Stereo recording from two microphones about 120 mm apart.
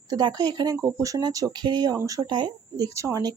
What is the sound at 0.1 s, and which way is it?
Speech, 35° right (ahead or behind).